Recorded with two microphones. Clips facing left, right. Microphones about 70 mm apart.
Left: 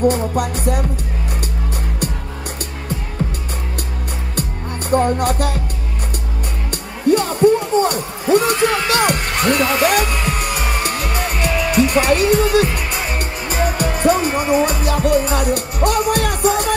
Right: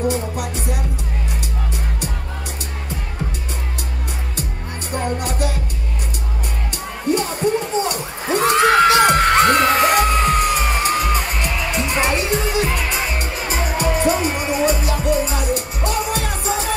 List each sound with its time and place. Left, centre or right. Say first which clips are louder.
0.1 s music: left 4 dB; left
4.9 s music: left 8 dB; left
6.7 s music: left 5 dB; left
8.4 s a sound: right 6 dB; right
9.0 s music: right 4 dB; right
11.1 s music: left 3 dB; left